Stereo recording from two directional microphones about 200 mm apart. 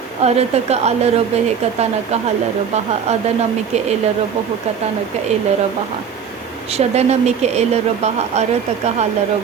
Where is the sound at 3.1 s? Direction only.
35° right (ahead or behind).